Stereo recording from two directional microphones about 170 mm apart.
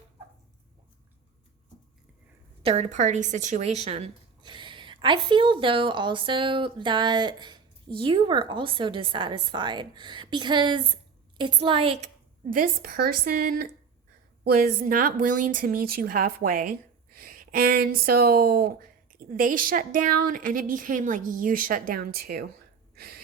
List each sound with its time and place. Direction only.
2.6 s a woman's voice: 40° right (ahead or behind)
12.5 s a woman's voice: 55° right (ahead or behind)
19.3 s a woman's voice: 50° right (ahead or behind)
23.0 s wheeze: 65° right (ahead or behind)